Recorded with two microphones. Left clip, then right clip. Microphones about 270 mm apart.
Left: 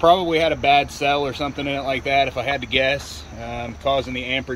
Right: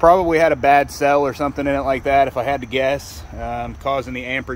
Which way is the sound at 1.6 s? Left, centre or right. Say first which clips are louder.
Right 5 dB; centre.